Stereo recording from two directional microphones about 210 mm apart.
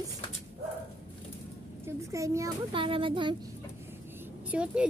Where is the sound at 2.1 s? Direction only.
15° right (ahead or behind).